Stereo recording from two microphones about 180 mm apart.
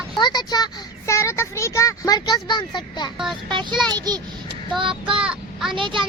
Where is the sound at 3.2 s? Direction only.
Centre (ahead or behind).